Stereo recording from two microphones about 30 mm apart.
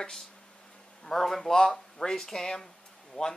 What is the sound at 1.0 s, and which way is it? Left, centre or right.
Speech, centre.